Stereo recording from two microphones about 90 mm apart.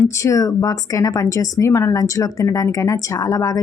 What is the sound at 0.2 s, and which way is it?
A woman's voice, 35° left (ahead or behind).